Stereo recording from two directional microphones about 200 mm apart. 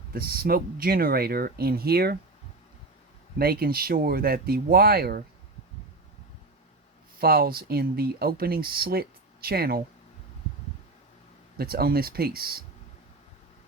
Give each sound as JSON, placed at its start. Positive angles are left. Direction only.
{"t": 0.1, "sound": "speech", "side_deg": -50}
{"t": 3.3, "sound": "speech", "side_deg": -50}
{"t": 7.2, "sound": "speech", "side_deg": -50}
{"t": 11.5, "sound": "speech", "side_deg": -50}